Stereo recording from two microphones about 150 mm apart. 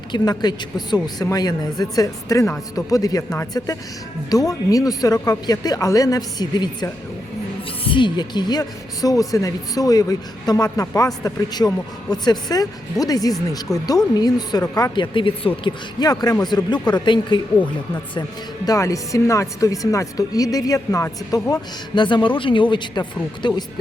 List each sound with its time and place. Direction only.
0.1 s speech: 30° left (ahead or behind)
4.3 s speech: 25° left (ahead or behind)